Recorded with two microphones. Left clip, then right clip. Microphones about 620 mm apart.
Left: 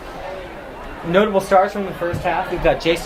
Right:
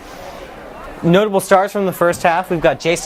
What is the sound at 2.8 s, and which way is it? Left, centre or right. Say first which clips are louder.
Speech: right 1 dB; right.